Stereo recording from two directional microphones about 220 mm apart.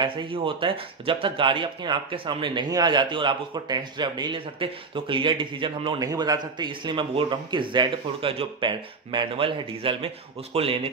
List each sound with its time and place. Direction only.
0.0 s speech: 20° right (ahead or behind)